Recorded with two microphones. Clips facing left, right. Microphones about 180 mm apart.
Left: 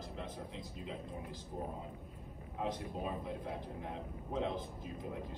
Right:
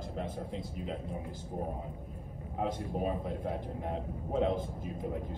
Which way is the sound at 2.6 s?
50° right (ahead or behind).